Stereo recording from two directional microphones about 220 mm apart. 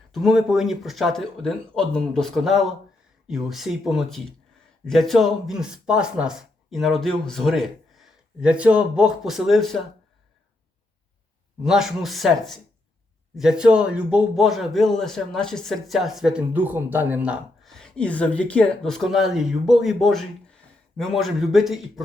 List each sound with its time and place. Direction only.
0.1 s a man's voice: centre (ahead or behind)
11.6 s a man's voice: centre (ahead or behind)